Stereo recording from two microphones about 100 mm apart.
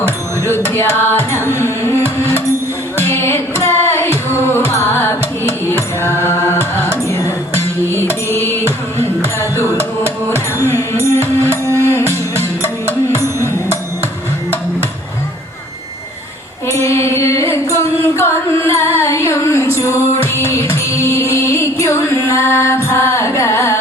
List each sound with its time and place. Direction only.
0.5 s music: 25° left (ahead or behind)
1.4 s carnatic music: 25° right (ahead or behind)
1.6 s music: 25° left (ahead or behind)
11.4 s music: 30° right (ahead or behind)
11.8 s music: 25° left (ahead or behind)
16.8 s carnatic music: 30° left (ahead or behind)